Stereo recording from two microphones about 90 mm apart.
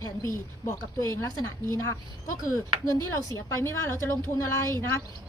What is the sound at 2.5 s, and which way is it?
A woman's voice, 35° left (ahead or behind).